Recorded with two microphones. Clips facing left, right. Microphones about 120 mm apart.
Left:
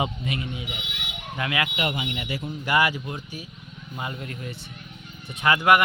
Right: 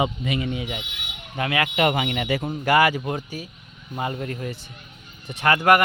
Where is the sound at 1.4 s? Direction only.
35° right (ahead or behind).